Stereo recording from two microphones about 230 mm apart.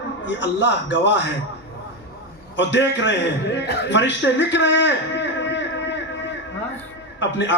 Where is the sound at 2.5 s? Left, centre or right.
Left.